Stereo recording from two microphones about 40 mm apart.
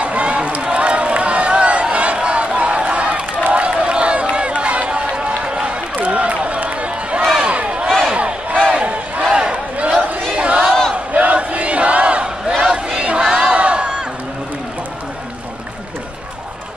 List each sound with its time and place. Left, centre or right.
0.0 s run: right
3.4 s crowd: right
7.4 s a sound: right
8.1 s crowd: right
10.3 s a sound: right
11.1 s battle cry: right
12.6 s crowd: right